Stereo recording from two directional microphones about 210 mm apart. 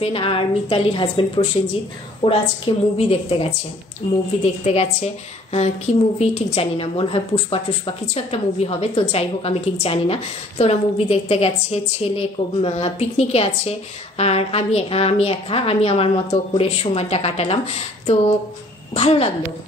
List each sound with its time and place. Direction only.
0.0 s a woman's voice: 25° left (ahead or behind)
18.9 s a woman's voice: 30° left (ahead or behind)